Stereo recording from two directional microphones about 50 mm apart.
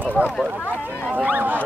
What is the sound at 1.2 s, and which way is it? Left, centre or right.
Speech, right.